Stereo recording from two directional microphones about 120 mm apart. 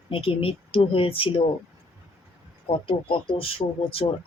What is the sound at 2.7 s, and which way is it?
Speech, 45° left (ahead or behind).